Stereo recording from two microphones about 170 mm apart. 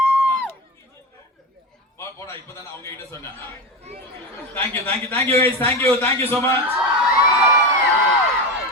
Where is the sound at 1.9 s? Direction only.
15° left (ahead or behind).